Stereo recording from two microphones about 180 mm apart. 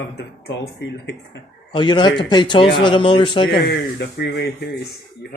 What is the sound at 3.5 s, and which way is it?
Speech, 65° left (ahead or behind).